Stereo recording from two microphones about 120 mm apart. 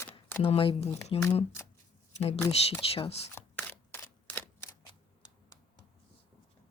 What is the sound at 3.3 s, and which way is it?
Camera, 15° left (ahead or behind).